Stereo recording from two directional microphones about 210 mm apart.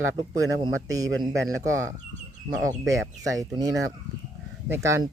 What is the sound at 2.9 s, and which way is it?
Speech, 15° right (ahead or behind).